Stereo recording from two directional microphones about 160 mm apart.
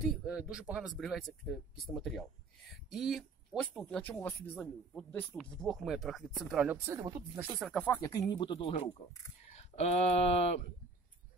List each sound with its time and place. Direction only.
0.1 s speech: 5° right (ahead or behind)
6.9 s speech: 20° right (ahead or behind)
7.5 s speech: 5° left (ahead or behind)
8.3 s speech: 30° left (ahead or behind)